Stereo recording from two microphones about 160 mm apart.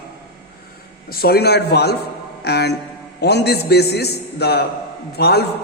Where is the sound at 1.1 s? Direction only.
70° left (ahead or behind); by 1.9 s 90° left.